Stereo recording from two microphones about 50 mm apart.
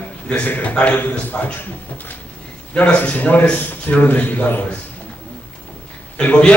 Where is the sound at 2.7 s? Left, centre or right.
Left.